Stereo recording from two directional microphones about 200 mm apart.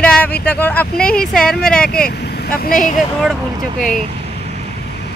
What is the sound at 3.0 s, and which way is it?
Speech, centre (ahead or behind).